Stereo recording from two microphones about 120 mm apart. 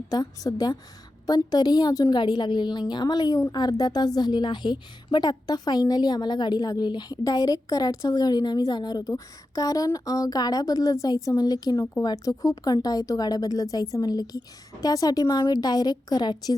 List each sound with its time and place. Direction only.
0.1 s a woman's voice: 30° left (ahead or behind)